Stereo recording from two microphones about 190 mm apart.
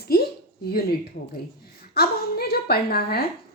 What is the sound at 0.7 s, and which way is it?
Speech, 55° left (ahead or behind).